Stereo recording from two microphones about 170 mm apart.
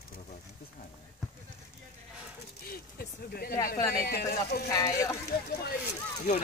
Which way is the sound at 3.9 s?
60° left (ahead or behind).